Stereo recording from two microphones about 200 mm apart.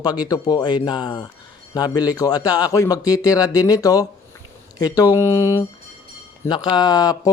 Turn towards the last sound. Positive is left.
turn(degrees=20)  # may be behind; listen again after turning